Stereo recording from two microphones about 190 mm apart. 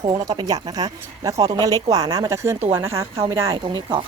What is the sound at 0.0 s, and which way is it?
Speech, 20° right (ahead or behind).